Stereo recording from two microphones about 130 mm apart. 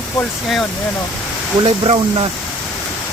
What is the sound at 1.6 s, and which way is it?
Speech, 40° right (ahead or behind).